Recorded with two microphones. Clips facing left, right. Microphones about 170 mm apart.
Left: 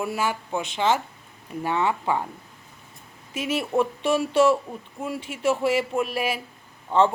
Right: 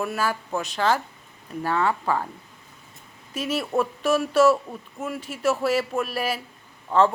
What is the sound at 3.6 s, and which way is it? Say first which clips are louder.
Speech: left 2 dB; 25° left (ahead or behind).